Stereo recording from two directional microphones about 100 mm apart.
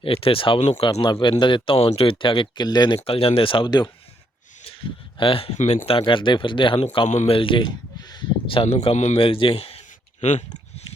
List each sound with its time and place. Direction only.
0.0 s speech: 70° left (ahead or behind); by 3.0 s 45° left (ahead or behind)
3.0 s speech: 70° left (ahead or behind)
6.0 s speech: 55° left (ahead or behind)
8.4 s a man's voice: 80° left